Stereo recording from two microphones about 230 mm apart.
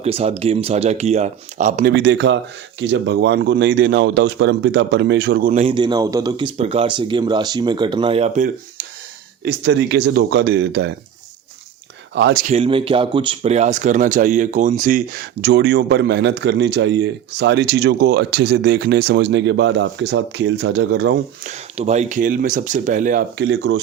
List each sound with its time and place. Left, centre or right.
0.0 s speech: right
1.9 s a man's voice: right
9.4 s speech: right
10.7 s speech: right
12.1 s speech: right
12.4 s speech: right
21.4 s a man's voice: right